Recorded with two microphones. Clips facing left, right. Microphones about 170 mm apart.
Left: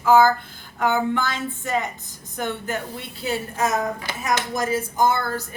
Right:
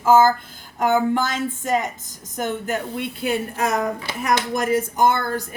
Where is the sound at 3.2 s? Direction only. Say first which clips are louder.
Right 3 dB; 55° right (ahead or behind).